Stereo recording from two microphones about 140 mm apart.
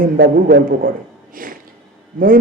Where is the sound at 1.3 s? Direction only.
80° right.